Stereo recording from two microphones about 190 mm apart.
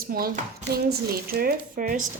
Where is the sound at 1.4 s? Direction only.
50° right (ahead or behind).